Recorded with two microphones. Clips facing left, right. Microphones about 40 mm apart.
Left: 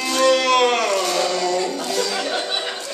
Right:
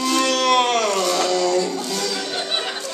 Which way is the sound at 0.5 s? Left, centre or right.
Left.